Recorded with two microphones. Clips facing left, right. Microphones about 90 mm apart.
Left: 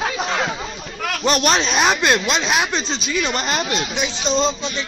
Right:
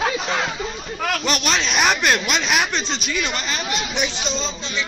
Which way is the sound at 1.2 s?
40° left (ahead or behind).